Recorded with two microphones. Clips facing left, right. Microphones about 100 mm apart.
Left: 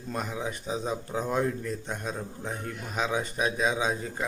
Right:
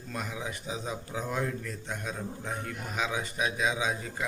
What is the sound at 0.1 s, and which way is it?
Speech, 30° left (ahead or behind).